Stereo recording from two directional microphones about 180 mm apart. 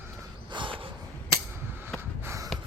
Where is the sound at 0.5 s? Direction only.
30° right (ahead or behind).